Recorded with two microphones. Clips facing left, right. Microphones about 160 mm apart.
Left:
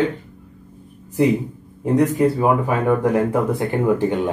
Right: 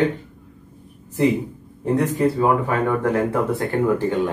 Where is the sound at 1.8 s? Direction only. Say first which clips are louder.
Left 3 dB; 10° left (ahead or behind).